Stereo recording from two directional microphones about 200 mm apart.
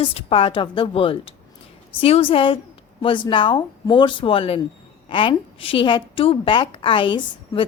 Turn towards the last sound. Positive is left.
turn(degrees=25)  # may be behind; listen again after turning